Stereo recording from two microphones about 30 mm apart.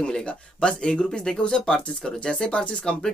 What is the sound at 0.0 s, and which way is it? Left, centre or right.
Speech, left.